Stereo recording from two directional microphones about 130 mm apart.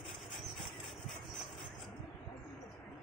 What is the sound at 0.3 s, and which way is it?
Vehicle, centre (ahead or behind).